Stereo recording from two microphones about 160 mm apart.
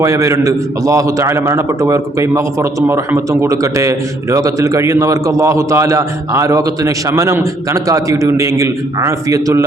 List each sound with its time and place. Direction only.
0.0 s a man's voice: 20° right (ahead or behind)